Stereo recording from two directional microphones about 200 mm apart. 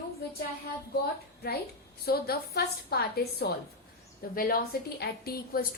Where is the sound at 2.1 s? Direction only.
50° left (ahead or behind).